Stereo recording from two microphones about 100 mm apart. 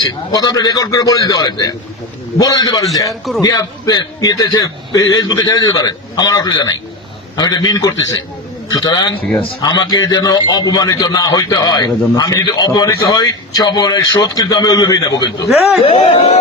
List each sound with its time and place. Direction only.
0.0 s a man's voice: 40° left (ahead or behind)
3.1 s a man's voice: centre (ahead or behind)
3.4 s a man's voice: 40° left (ahead or behind)
15.8 s speech: 70° left (ahead or behind)